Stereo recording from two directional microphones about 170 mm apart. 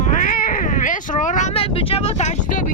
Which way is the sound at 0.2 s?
55° left (ahead or behind).